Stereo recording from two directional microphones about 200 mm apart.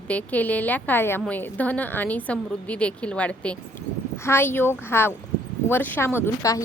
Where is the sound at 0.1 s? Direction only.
10° left (ahead or behind).